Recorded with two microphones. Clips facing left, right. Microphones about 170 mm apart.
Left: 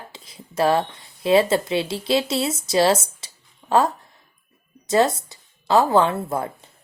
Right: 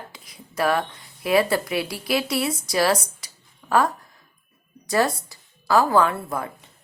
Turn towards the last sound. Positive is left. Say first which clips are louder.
# left 2 dB
turn(degrees=25)  # may be behind; listen again after turning